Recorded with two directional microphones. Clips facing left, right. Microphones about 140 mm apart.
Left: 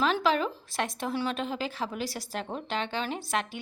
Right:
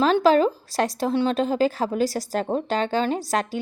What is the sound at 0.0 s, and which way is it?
A woman's voice, 40° right (ahead or behind).